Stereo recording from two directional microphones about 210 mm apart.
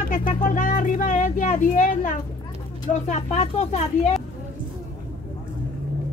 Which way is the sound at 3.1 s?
30° left (ahead or behind).